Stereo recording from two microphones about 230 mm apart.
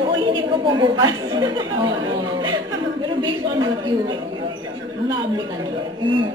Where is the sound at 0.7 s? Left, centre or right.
Centre.